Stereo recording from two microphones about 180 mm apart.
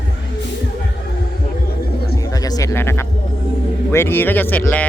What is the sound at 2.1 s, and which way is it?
Music, 20° left (ahead or behind).